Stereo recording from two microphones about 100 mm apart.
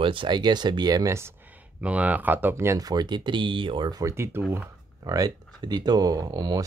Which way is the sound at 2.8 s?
40° right (ahead or behind).